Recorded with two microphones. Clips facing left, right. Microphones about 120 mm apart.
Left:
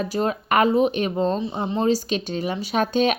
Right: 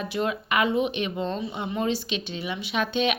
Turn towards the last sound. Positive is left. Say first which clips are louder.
# left 5 dB
turn(degrees=40)  # may be behind; listen again after turning